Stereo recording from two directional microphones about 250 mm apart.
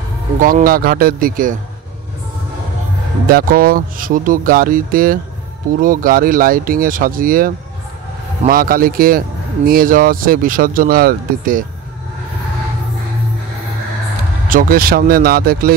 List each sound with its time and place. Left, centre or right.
0.4 s speech: right
3.3 s speech: right
14.5 s speech: right